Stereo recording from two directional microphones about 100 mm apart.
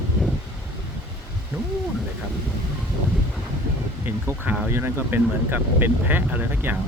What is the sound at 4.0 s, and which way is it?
Speech, 20° right (ahead or behind).